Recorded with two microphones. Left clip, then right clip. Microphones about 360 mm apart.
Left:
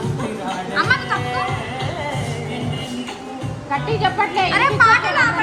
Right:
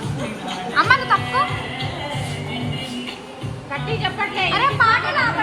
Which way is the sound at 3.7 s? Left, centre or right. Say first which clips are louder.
Left 5 dB; left.